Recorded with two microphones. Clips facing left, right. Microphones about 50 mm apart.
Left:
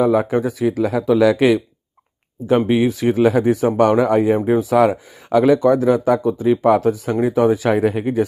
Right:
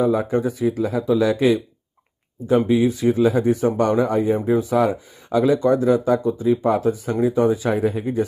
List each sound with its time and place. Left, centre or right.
0.0 s speech: left
2.7 s speech: left
4.4 s speech: left